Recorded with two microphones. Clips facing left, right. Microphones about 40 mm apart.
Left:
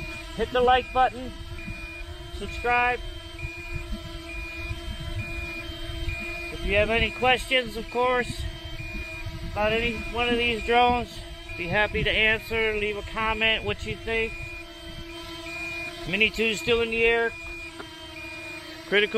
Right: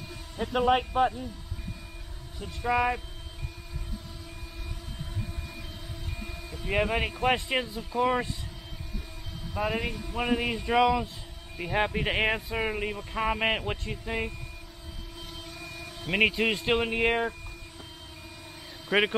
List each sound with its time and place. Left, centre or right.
0.4 s speech: centre
2.4 s speech: left
5.3 s vehicle: left
6.7 s speech: centre
7.4 s speech: centre
9.5 s speech: left
16.1 s speech: centre
18.9 s a man's voice: centre